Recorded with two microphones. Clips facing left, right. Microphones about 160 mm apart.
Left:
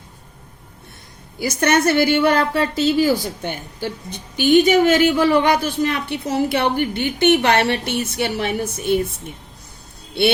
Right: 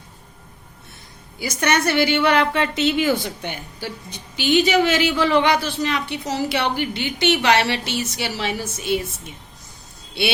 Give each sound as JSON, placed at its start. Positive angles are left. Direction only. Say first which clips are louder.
{"t": 1.4, "sound": "a woman's voice", "louder": "left 4 dB", "side_deg": 50}